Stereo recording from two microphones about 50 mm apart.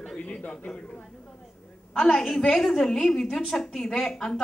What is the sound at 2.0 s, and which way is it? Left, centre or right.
A woman's voice, centre.